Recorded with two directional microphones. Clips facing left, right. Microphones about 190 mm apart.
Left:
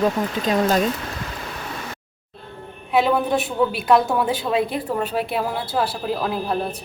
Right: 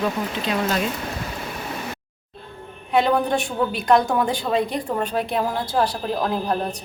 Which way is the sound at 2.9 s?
5° left (ahead or behind).